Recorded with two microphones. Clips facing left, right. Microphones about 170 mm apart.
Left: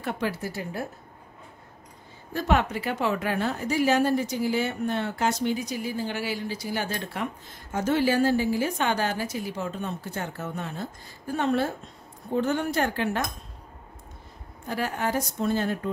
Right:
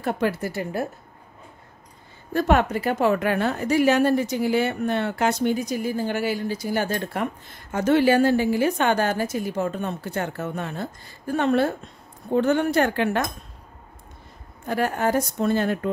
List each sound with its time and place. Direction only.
0.0 s a woman's voice: 50° right (ahead or behind)
2.3 s a woman's voice: 50° right (ahead or behind)
7.7 s a woman's voice: 65° right (ahead or behind)
14.7 s a woman's voice: 50° right (ahead or behind); by 15.9 s 65° right (ahead or behind)